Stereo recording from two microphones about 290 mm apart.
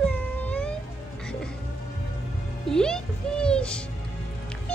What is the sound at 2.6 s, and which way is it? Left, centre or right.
Music, centre.